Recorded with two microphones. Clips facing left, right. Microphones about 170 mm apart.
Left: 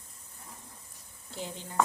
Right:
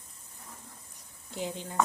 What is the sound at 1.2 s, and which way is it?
Speech, 15° right (ahead or behind).